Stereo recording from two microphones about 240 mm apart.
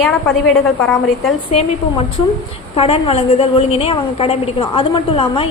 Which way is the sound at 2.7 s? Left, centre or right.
Left.